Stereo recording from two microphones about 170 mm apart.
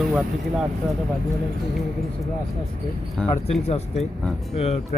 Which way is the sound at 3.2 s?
5° left (ahead or behind).